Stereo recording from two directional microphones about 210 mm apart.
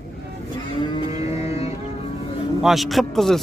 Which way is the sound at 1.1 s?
30° left (ahead or behind).